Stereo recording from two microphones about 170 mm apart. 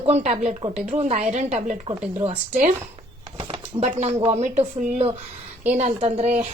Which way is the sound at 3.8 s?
40° right (ahead or behind).